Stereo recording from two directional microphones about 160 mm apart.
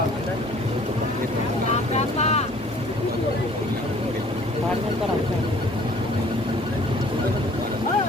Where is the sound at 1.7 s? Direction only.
45° left (ahead or behind).